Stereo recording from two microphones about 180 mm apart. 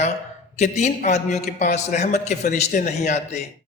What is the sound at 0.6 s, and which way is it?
A man's voice, 40° left (ahead or behind).